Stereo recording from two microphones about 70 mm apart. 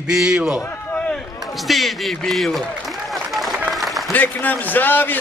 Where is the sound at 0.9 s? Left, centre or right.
Centre.